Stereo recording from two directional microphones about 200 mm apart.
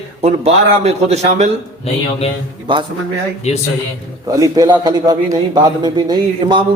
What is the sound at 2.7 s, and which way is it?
Speech, 25° right (ahead or behind).